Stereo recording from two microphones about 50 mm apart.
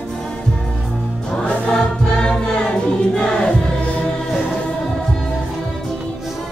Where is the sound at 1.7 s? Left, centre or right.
Centre.